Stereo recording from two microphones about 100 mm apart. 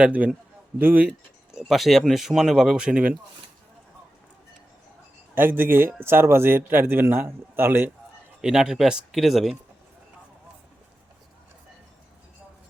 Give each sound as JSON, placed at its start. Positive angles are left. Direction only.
{"t": 0.0, "sound": "a man's voice", "side_deg": -15}
{"t": 1.5, "sound": "speech", "side_deg": 0}
{"t": 5.3, "sound": "a man's voice", "side_deg": -20}
{"t": 8.4, "sound": "speech", "side_deg": -5}